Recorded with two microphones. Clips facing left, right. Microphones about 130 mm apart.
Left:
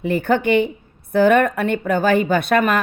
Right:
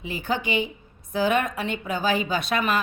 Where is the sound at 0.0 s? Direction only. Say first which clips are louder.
Left 10 dB; 55° left (ahead or behind).